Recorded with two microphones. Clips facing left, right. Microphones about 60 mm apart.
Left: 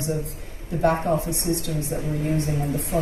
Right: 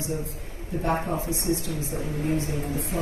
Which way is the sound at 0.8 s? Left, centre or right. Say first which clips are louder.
Left 6 dB; left.